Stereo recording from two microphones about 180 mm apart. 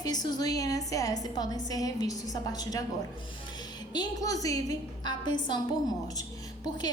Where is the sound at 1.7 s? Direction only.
20° left (ahead or behind).